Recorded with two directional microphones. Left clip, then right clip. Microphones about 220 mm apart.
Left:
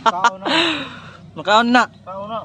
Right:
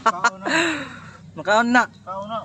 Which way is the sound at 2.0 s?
30° left (ahead or behind).